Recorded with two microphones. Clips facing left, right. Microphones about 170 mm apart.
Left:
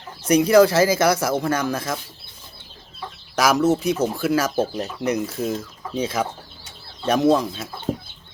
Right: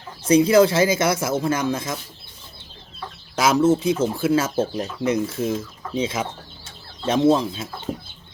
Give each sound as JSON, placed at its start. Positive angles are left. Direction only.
{"t": 0.3, "sound": "speech", "side_deg": -25}
{"t": 3.3, "sound": "speech", "side_deg": -25}